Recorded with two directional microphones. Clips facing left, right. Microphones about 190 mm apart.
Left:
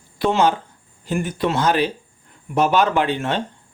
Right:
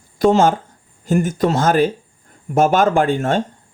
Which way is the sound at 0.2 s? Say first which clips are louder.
Right 4 dB; 45° right (ahead or behind).